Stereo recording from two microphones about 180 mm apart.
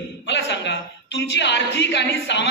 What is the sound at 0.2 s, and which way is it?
A woman's voice, 75° left (ahead or behind).